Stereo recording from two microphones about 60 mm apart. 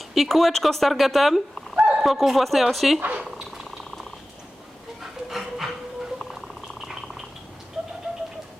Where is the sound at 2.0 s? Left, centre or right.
Centre.